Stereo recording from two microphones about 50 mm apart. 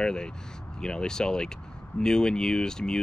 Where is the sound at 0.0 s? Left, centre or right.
Centre.